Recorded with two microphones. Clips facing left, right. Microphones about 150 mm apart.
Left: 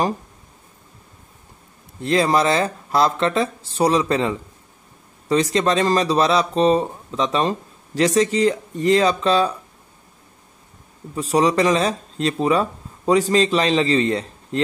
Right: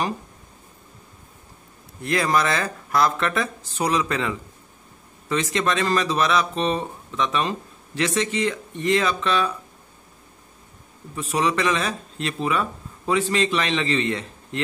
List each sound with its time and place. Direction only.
2.0 s speech: 30° left (ahead or behind)
11.1 s speech: 35° left (ahead or behind)